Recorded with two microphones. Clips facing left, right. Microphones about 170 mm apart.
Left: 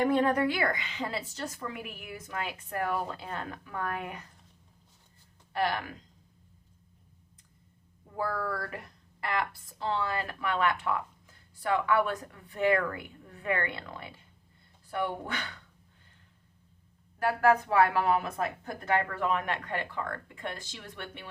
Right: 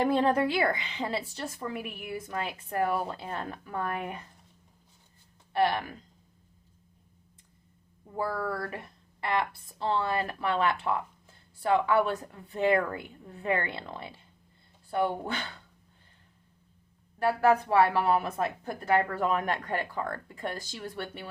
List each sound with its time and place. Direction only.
0.0 s speech: 30° right (ahead or behind)
5.5 s speech: 25° right (ahead or behind)
8.1 s speech: 25° right (ahead or behind)
17.7 s speech: 30° right (ahead or behind)